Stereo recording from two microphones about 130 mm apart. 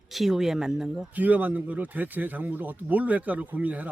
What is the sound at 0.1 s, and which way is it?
Speech, 5° right (ahead or behind).